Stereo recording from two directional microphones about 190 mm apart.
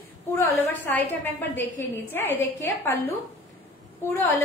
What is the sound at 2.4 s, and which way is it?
Speech, 10° left (ahead or behind).